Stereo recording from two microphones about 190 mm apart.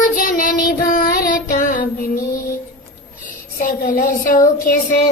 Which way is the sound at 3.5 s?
45° left (ahead or behind).